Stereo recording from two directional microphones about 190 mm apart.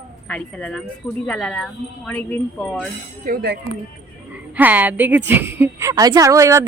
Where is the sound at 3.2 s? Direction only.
55° right (ahead or behind).